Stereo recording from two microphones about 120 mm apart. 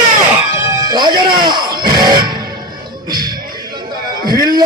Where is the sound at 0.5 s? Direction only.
25° right (ahead or behind).